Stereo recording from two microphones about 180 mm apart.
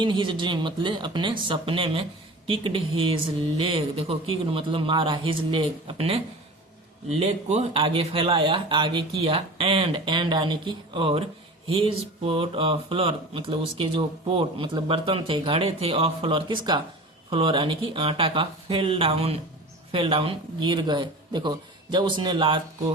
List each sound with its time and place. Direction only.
0.0 s speech: 25° right (ahead or behind)